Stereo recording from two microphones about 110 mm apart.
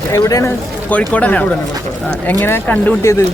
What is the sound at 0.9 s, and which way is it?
Speech, 15° left (ahead or behind).